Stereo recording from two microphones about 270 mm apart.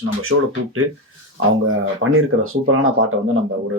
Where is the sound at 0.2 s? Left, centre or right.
Right.